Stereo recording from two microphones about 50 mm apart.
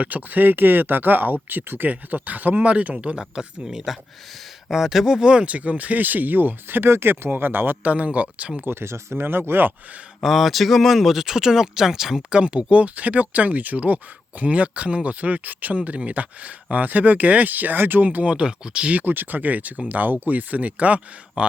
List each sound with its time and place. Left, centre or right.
0.0 s speech: right
7.9 s speech: right
8.6 s speech: right
10.2 s speech: centre
12.3 s speech: right
19.0 s speech: right